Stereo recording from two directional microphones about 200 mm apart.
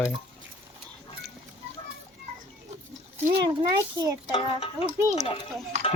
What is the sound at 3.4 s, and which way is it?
Speech, 20° right (ahead or behind).